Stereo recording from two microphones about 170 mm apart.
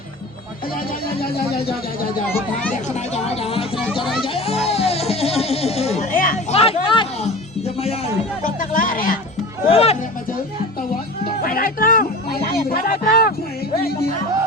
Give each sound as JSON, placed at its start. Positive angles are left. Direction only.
{"t": 2.3, "sound": "speech", "side_deg": 10}
{"t": 2.9, "sound": "speech", "side_deg": 35}
{"t": 4.6, "sound": "music", "side_deg": 35}
{"t": 6.5, "sound": "music", "side_deg": 35}
{"t": 8.4, "sound": "a sound", "side_deg": 50}
{"t": 9.6, "sound": "music", "side_deg": 35}
{"t": 11.4, "sound": "speech", "side_deg": 55}